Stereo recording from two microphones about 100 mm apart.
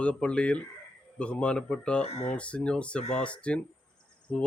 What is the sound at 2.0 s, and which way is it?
Speech, 85° left.